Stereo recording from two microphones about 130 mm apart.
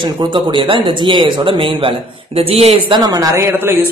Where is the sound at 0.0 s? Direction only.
40° right (ahead or behind).